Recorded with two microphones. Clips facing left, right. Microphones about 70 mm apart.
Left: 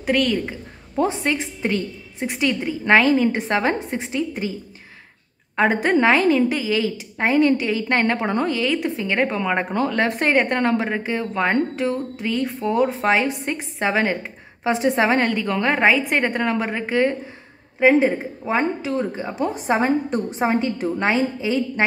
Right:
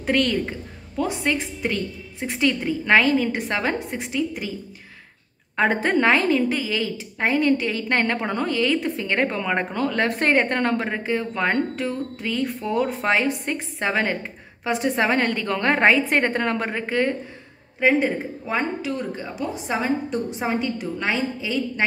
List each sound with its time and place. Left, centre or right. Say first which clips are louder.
0.0 s a woman's voice: left 1 dB; centre
1.2 s a woman's voice: left 1 dB; centre
5.6 s a woman's voice: left 2 dB; centre
19.3 s a woman's voice: left 6 dB; left